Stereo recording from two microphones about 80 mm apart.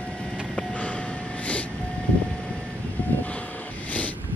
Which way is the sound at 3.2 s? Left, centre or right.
Centre.